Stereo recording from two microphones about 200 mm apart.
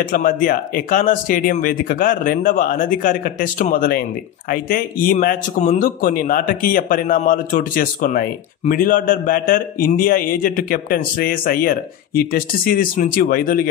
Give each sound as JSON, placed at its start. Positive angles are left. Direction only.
{"t": 0.0, "sound": "speech", "side_deg": 45}